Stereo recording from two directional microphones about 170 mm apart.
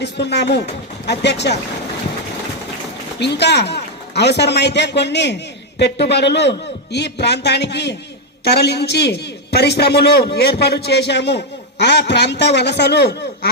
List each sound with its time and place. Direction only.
0.0 s a man's voice: 80° left
3.2 s a man's voice: 85° left